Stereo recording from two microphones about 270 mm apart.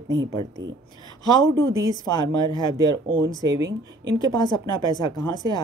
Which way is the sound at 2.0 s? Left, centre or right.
Centre.